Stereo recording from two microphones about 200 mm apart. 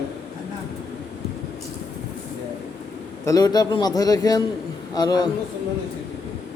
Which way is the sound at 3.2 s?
20° left (ahead or behind).